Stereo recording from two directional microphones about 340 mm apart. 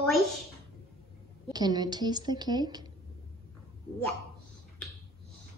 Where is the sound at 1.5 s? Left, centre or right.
Centre.